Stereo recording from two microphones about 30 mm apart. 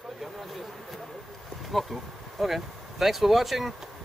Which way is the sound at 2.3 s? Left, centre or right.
Centre.